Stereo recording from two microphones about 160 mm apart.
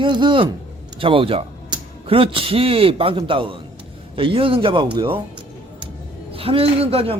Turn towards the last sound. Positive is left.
turn(degrees=-35)  # may be behind; listen again after turning